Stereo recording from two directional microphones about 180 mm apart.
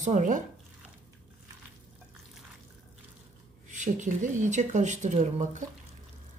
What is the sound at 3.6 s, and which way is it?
Speech, 45° right (ahead or behind).